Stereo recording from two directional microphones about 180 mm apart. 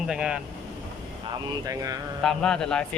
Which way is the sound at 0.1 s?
5° right (ahead or behind).